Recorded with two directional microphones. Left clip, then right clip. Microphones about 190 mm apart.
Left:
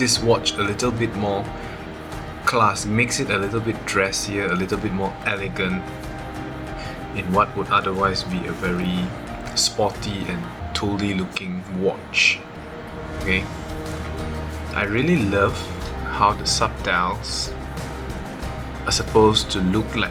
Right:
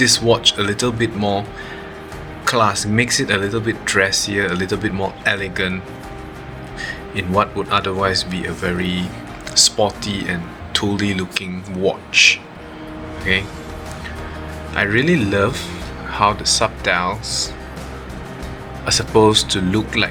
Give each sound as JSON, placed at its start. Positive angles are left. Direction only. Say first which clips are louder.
{"t": 0.0, "sound": "speech", "louder": "right 5 dB", "side_deg": -40}
{"t": 2.4, "sound": "speech", "louder": "right 2 dB", "side_deg": -45}
{"t": 7.2, "sound": "speech", "louder": "right 2 dB", "side_deg": -45}
{"t": 14.7, "sound": "speech", "louder": "right 5 dB", "side_deg": -40}
{"t": 18.9, "sound": "speech", "louder": "right 3 dB", "side_deg": -40}